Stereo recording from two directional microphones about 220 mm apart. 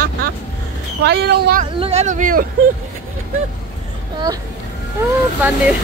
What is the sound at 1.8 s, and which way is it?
Speech, 30° right (ahead or behind).